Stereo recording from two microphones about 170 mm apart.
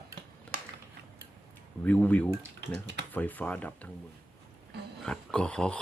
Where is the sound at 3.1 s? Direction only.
10° left (ahead or behind).